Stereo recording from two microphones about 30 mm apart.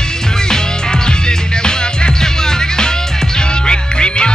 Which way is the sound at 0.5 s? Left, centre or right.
Left.